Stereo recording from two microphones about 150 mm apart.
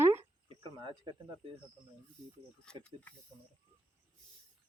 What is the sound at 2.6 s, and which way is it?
Speech, 5° left (ahead or behind).